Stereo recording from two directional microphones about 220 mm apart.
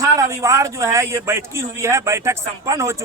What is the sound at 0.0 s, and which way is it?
A man's voice, 15° right (ahead or behind).